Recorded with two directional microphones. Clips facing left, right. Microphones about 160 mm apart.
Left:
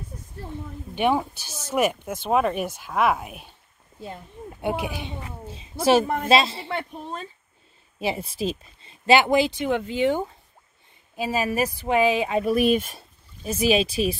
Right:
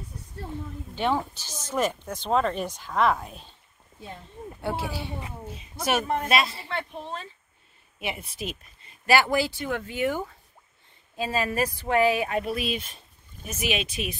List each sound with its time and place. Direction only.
0.9 s speech: 15° left (ahead or behind)
4.6 s speech: 15° left (ahead or behind)
8.0 s speech: 35° left (ahead or behind)
11.1 s speech: 10° left (ahead or behind)
12.4 s speech: 45° left (ahead or behind)
13.4 s speech: 35° left (ahead or behind)